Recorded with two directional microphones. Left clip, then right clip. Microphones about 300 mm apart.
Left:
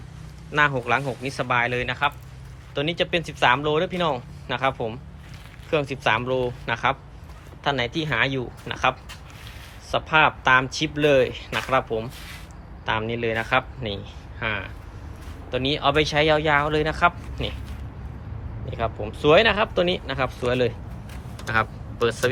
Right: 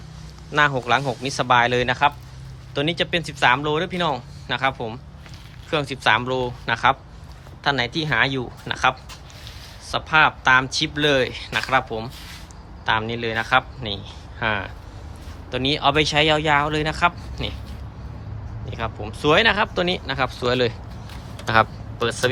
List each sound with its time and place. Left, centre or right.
0.5 s speech: centre
18.7 s speech: centre
21.4 s a sound: centre